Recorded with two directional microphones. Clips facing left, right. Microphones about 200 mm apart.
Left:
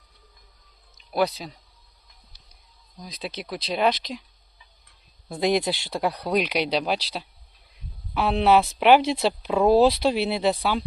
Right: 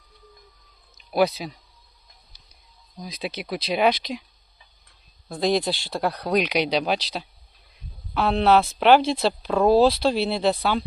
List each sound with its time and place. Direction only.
1.1 s speech: 5° right (ahead or behind)
3.2 s speech: 5° right (ahead or behind)
5.3 s speech: 20° left (ahead or behind)